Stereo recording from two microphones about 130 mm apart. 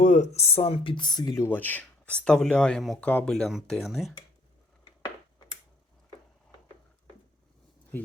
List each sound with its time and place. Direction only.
0.0 s speech: 65° left (ahead or behind); by 1.5 s 30° left (ahead or behind)
1.5 s speech: 15° left (ahead or behind)